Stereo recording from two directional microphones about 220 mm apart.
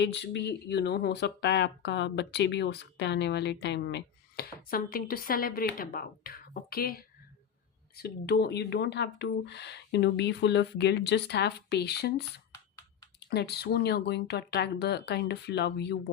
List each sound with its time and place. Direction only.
0.0 s speech: 50° left (ahead or behind)